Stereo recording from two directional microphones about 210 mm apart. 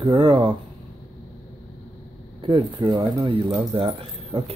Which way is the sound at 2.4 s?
25° right (ahead or behind).